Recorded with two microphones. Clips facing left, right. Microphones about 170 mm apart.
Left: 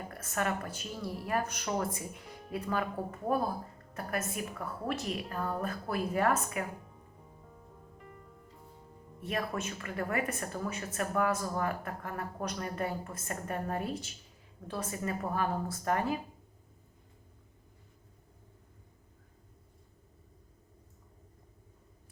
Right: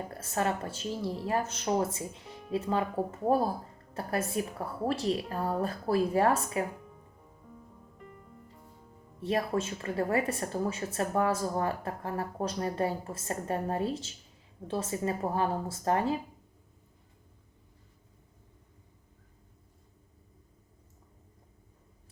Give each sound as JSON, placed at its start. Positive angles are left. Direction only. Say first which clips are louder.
{"t": 0.1, "sound": "a woman's voice", "louder": "right 2 dB", "side_deg": -30}
{"t": 9.2, "sound": "speech", "louder": "right 5 dB", "side_deg": -30}